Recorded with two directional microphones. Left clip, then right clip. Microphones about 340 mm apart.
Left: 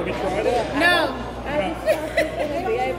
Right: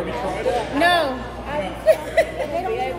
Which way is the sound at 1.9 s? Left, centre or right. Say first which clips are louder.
Right 6 dB; centre.